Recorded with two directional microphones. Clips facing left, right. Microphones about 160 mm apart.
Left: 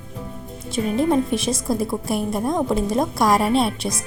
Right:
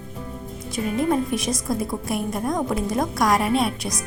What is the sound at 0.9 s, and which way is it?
Speech, 25° left (ahead or behind).